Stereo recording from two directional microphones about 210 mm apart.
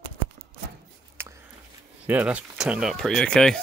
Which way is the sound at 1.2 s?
10° right (ahead or behind).